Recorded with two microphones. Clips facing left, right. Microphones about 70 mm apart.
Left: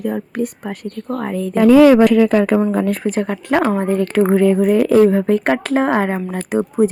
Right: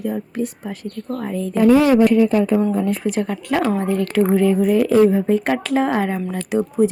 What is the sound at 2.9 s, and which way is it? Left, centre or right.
Speech, left.